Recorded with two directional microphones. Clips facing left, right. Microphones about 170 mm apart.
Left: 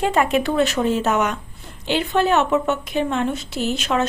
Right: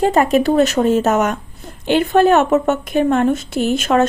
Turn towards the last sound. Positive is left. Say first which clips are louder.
# right 6 dB
turn(degrees=-50)  # may be behind; listen again after turning